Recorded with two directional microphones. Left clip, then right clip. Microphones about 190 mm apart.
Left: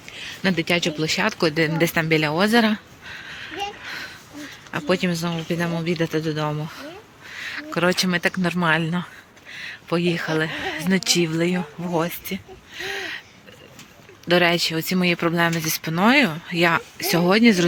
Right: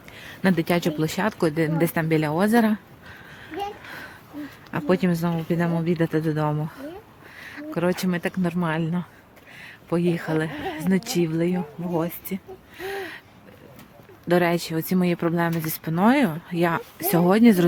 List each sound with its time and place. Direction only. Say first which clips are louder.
0.2 s speech: left 1 dB; 25° right (ahead or behind)
2.4 s a sound: left 2 dB; 15° right (ahead or behind)
3.6 s a child's voice: left 1 dB; 20° right (ahead or behind)
7.3 s a woman's voice: left 5 dB; 10° right (ahead or behind)
12.8 s gasp: left 3 dB; 15° right (ahead or behind)
14.3 s speech: left 3 dB; 20° right (ahead or behind)